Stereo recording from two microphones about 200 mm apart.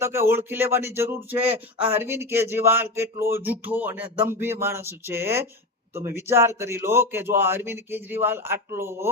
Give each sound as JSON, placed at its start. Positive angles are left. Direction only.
{"t": 0.0, "sound": "speech", "side_deg": -10}